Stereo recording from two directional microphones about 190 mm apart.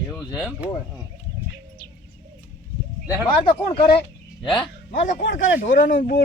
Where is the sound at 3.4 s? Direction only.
25° left (ahead or behind).